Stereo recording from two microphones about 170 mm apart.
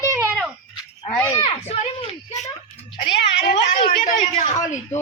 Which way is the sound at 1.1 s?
10° left (ahead or behind).